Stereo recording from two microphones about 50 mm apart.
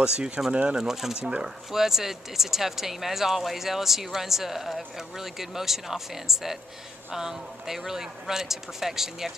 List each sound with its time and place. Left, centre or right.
0.0 s speech: centre